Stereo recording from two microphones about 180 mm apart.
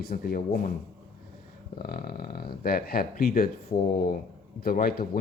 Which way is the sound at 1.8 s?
55° left (ahead or behind).